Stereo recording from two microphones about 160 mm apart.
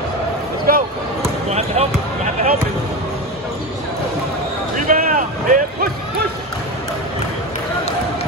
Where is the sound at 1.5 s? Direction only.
40° right (ahead or behind).